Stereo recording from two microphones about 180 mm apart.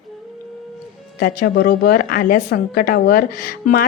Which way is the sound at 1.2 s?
55° left (ahead or behind).